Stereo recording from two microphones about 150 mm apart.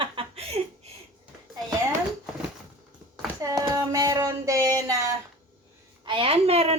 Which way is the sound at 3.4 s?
25° right (ahead or behind).